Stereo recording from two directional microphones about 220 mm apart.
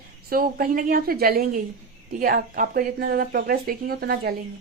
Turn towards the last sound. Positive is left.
turn(degrees=-45)  # may be behind; listen again after turning